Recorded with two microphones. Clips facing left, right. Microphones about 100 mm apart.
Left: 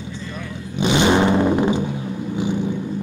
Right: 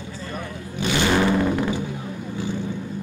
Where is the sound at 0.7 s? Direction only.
20° left (ahead or behind).